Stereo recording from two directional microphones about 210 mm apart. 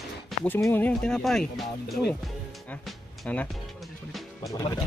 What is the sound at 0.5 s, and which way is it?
Speech, 10° left (ahead or behind).